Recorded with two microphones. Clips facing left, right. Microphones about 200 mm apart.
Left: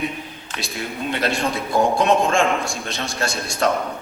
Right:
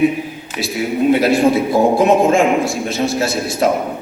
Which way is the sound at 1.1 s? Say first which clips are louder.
Right 9 dB; 5° right (ahead or behind).